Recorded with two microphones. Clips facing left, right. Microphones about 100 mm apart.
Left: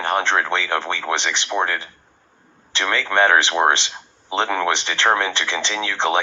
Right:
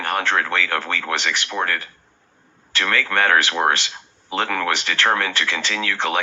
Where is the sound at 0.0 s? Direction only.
20° left (ahead or behind).